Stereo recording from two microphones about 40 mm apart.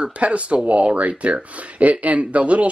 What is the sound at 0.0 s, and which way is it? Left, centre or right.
Speech, right.